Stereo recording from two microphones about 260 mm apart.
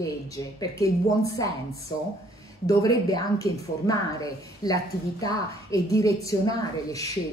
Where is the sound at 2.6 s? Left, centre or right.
Centre.